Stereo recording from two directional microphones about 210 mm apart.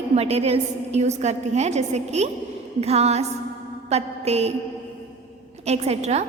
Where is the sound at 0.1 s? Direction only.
30° right (ahead or behind).